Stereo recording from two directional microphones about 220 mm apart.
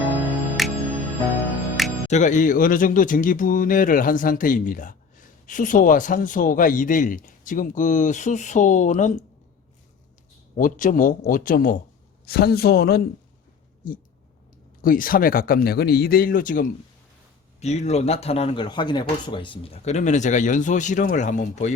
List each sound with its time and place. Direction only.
0.3 s music: centre (ahead or behind)
2.0 s speech: 35° left (ahead or behind)
10.6 s a man's voice: 35° left (ahead or behind)
14.8 s speech: 40° left (ahead or behind)